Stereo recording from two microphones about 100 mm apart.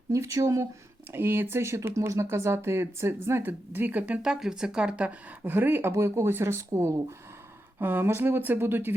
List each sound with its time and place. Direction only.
0.1 s speech: 30° right (ahead or behind)